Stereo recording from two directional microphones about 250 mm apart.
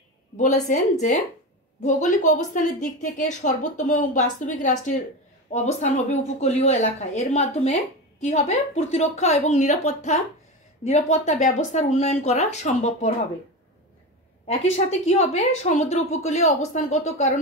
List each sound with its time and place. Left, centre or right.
0.7 s a woman's voice: left
14.5 s a woman's voice: left